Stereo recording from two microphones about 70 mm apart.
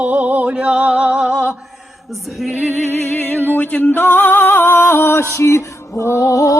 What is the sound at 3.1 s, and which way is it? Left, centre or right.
Music, left.